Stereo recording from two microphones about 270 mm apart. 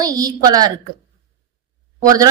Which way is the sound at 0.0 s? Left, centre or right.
Centre.